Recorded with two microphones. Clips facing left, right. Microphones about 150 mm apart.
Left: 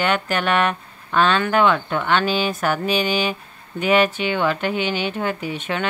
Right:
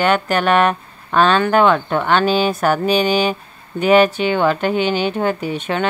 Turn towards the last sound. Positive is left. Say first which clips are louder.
# right 4 dB
turn(degrees=-35)  # may be behind; listen again after turning